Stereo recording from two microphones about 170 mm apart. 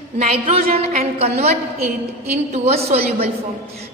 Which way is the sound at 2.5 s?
40° right (ahead or behind).